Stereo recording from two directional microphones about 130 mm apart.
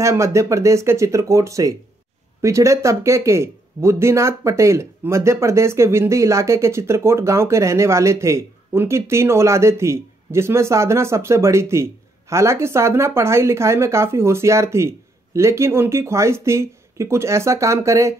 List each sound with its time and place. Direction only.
0.0 s speech: 25° right (ahead or behind)